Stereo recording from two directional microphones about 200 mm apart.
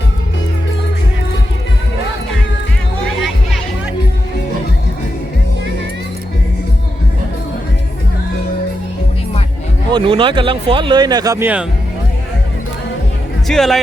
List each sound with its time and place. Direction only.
3.2 s music: centre (ahead or behind)
9.9 s speech: 25° right (ahead or behind); by 11.6 s 10° right (ahead or behind)
13.5 s speech: centre (ahead or behind)